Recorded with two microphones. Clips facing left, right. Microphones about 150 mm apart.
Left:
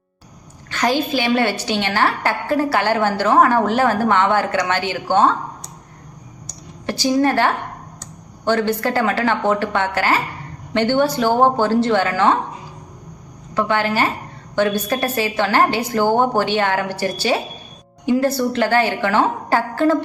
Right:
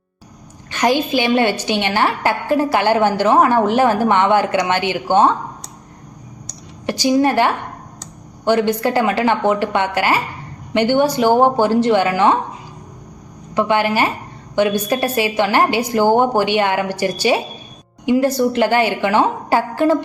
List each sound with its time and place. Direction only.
0.7 s a woman's voice: 15° right (ahead or behind)
6.8 s a woman's voice: 15° right (ahead or behind)
13.5 s a woman's voice: 15° right (ahead or behind)